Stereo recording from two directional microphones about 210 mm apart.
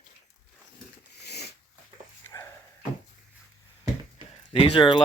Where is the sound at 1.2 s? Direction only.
50° left (ahead or behind).